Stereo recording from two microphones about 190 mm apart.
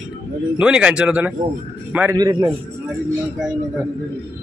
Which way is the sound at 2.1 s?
20° right (ahead or behind).